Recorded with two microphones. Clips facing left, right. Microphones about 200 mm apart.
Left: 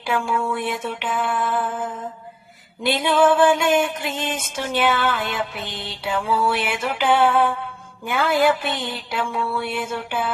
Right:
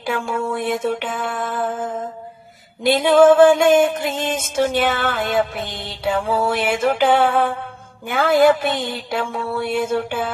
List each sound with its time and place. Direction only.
0.0 s music: 45° right (ahead or behind)